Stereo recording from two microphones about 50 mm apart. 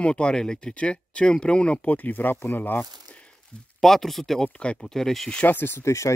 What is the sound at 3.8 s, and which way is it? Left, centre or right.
Speech, centre.